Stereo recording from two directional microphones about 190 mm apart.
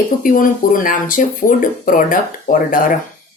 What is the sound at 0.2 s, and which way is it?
Speech, 45° left (ahead or behind).